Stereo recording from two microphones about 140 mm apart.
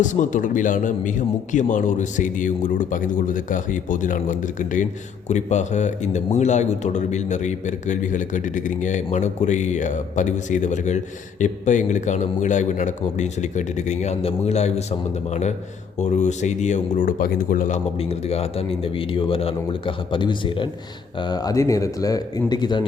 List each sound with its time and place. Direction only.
0.0 s a man's voice: 60° left (ahead or behind)
5.3 s speech: 55° left (ahead or behind); by 17.7 s 75° left (ahead or behind)
18.0 s speech: 45° left (ahead or behind); by 22.9 s 30° left (ahead or behind)